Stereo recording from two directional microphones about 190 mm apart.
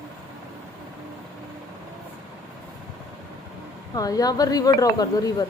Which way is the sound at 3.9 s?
20° left (ahead or behind).